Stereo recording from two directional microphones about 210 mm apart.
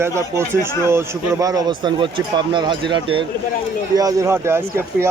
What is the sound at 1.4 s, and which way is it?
A man's voice, 15° right (ahead or behind).